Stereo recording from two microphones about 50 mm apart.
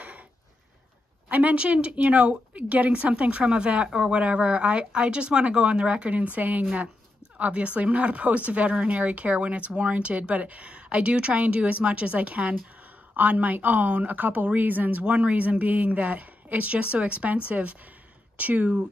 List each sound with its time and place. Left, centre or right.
1.3 s a woman's voice: right